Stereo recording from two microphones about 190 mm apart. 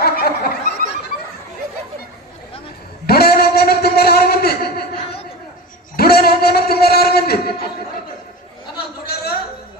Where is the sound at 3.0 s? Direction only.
55° left (ahead or behind).